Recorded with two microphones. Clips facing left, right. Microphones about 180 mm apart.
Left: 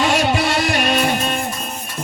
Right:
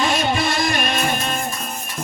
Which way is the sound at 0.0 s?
75° left (ahead or behind).